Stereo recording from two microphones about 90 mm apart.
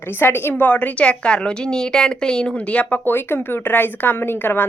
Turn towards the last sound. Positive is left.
turn(degrees=20)  # may be behind; listen again after turning